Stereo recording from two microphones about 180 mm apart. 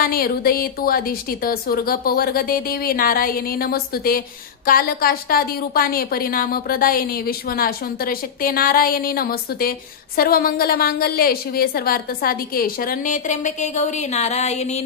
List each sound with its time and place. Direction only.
0.0 s a woman's voice: 55° left (ahead or behind); by 14.9 s 40° left (ahead or behind)